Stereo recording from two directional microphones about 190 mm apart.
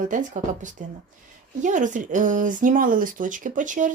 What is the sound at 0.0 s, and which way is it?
Speech, 40° right (ahead or behind).